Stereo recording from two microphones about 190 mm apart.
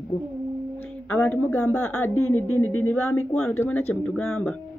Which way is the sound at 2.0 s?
90° left.